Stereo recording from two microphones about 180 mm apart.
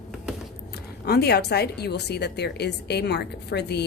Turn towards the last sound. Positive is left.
turn(degrees=65)  # may be behind; listen again after turning